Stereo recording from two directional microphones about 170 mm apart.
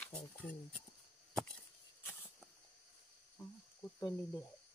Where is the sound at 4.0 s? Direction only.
25° left (ahead or behind).